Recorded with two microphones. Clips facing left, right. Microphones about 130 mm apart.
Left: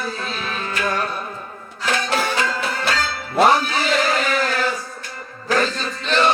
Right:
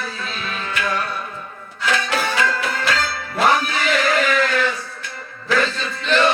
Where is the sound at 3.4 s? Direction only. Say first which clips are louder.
Left 2 dB; 35° left (ahead or behind).